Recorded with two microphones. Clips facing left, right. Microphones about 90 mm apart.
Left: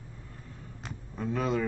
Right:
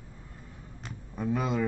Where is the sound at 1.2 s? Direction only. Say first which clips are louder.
Even; 10° right (ahead or behind).